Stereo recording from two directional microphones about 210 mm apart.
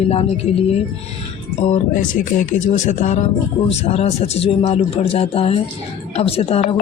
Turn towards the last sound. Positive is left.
turn(degrees=30)  # may be behind; listen again after turning